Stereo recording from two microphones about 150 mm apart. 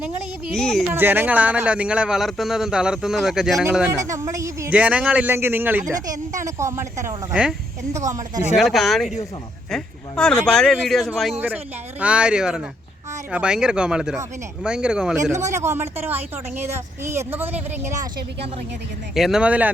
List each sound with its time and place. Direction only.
0.5 s speech: 5° left (ahead or behind)
0.9 s speech: 15° right (ahead or behind)
3.9 s speech: 20° right (ahead or behind)
4.7 s speech: 10° right (ahead or behind)
8.5 s speech: centre (ahead or behind)
11.3 s speech: 10° right (ahead or behind)
15.2 s speech: 50° right (ahead or behind)
15.4 s speech: 20° right (ahead or behind)
19.1 s speech: 5° right (ahead or behind)